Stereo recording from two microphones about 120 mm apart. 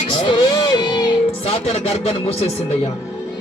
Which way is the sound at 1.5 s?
60° left (ahead or behind).